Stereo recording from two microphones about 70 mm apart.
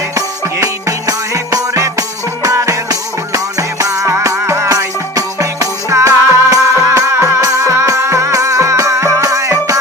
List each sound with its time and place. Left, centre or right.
0.6 s music: right